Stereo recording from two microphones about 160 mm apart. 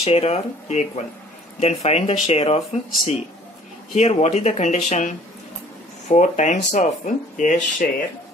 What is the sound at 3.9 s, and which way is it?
Speech, 45° left (ahead or behind).